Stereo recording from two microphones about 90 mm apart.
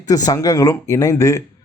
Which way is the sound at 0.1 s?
45° left (ahead or behind).